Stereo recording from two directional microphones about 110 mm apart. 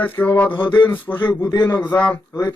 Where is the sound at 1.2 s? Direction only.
40° left (ahead or behind).